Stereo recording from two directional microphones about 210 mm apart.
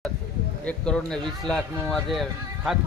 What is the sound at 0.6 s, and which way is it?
Speech, 5° left (ahead or behind).